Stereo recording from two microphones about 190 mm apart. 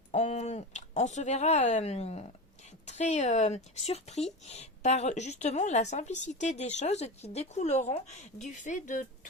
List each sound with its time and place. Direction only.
0.1 s speech: 35° left (ahead or behind)